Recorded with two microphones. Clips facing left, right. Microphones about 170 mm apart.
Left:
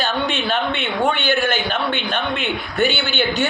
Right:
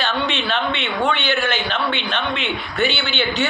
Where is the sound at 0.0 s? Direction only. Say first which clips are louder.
Left 1 dB; 50° left (ahead or behind).